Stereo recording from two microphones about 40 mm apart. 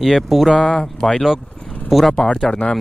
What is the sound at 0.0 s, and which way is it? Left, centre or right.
Speech, centre.